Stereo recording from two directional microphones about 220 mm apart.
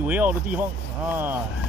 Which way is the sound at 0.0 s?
10° right (ahead or behind).